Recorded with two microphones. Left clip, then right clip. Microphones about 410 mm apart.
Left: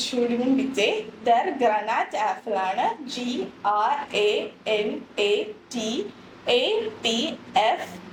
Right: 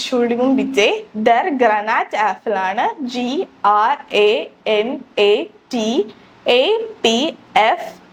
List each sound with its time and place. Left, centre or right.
0.1 s a woman's voice: right